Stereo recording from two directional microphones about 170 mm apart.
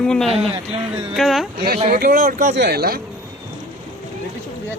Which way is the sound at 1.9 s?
60° right (ahead or behind).